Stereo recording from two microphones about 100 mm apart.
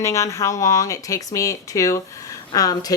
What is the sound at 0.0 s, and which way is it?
A woman's voice, 30° left (ahead or behind).